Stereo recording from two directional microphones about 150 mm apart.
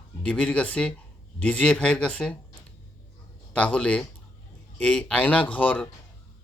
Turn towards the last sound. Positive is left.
turn(degrees=10)  # may be behind; listen again after turning